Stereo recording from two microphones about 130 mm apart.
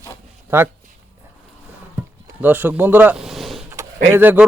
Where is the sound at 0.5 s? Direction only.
15° right (ahead or behind).